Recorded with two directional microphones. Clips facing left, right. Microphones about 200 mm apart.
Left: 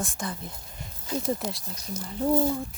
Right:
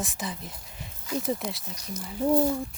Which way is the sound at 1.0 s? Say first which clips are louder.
Even; 30° left (ahead or behind).